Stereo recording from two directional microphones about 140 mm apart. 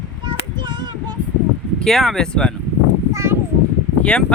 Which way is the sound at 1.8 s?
Centre (ahead or behind).